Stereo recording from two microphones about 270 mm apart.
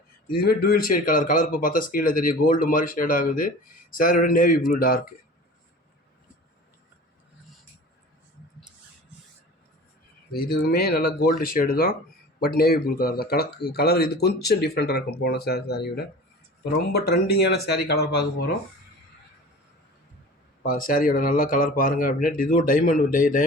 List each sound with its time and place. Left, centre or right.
0.3 s speech: left
10.3 s speech: left
20.6 s speech: left